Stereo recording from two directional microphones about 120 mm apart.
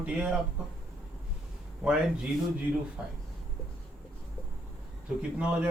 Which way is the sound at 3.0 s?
5° right (ahead or behind).